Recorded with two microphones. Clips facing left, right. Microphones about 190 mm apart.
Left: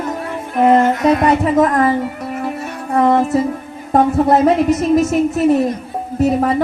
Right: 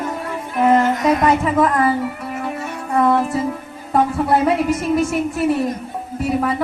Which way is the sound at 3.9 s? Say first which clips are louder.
Left 4 dB; 45° left (ahead or behind).